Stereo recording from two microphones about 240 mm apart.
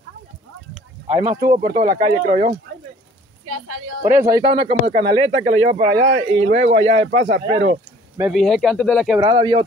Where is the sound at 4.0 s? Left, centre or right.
Centre; by 7.3 s right.